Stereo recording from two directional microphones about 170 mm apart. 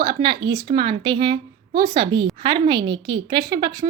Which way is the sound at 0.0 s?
25° right (ahead or behind).